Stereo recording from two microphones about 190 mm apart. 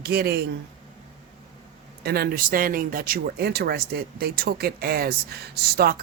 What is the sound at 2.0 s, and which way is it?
Speech, 55° right (ahead or behind).